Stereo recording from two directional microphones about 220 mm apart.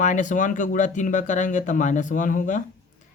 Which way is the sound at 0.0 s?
35° left (ahead or behind).